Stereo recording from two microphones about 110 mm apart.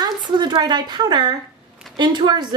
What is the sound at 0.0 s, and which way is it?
A woman's voice, 45° right (ahead or behind).